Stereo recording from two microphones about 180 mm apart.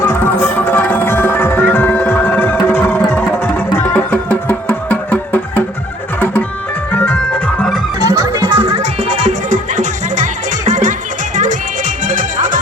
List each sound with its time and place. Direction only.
0.0 s music: 10° left (ahead or behind)
8.1 s music: 20° right (ahead or behind)
8.5 s music: 35° right (ahead or behind)
12.0 s music: 45° right (ahead or behind)